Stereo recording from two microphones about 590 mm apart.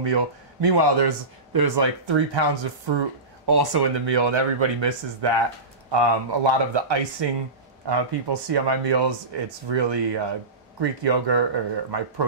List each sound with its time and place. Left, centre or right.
0.0 s speech: right